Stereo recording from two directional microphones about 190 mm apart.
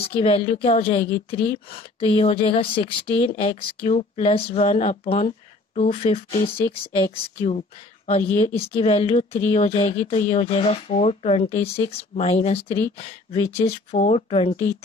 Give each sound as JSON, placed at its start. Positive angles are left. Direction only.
{"t": 0.0, "sound": "a woman's voice", "side_deg": 30}